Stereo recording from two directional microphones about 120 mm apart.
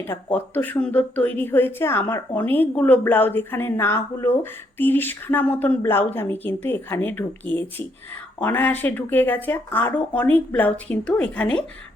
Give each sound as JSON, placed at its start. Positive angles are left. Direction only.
{"t": 0.0, "sound": "speech", "side_deg": 15}